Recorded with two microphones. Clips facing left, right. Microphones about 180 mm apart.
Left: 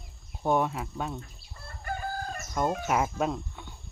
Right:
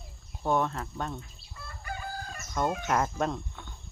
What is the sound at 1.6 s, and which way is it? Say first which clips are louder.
Chicken: left 4 dB; 50° left (ahead or behind).